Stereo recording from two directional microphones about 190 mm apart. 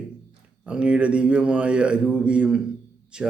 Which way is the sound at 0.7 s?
5° right (ahead or behind).